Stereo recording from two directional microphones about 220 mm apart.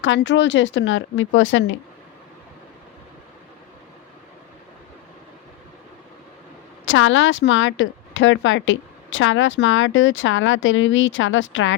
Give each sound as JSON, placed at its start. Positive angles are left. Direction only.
{"t": 0.0, "sound": "speech", "side_deg": 55}
{"t": 6.8, "sound": "speech", "side_deg": 60}